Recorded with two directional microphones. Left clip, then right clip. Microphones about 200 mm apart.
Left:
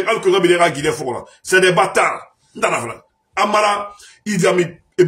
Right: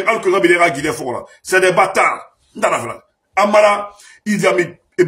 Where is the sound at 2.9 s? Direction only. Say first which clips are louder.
Right 5 dB; centre (ahead or behind).